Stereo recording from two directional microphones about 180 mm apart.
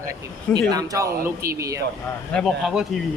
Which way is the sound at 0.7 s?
20° right (ahead or behind).